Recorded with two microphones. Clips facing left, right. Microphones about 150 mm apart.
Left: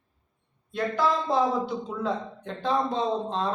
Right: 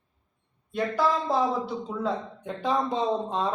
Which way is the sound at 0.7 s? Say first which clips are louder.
Even; 5° right (ahead or behind).